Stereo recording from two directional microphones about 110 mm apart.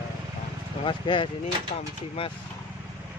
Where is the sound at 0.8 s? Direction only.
50° left (ahead or behind).